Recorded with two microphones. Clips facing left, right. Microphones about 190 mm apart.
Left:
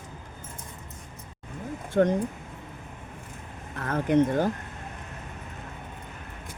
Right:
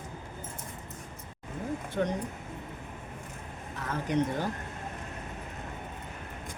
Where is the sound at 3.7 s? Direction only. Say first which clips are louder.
Left 7 dB; 55° left (ahead or behind).